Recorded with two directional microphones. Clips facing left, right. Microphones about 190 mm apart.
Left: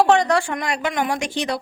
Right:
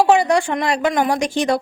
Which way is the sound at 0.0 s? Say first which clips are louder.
Right 2 dB; 10° right (ahead or behind).